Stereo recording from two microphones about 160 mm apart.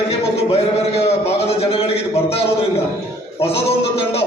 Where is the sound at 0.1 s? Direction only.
40° left (ahead or behind).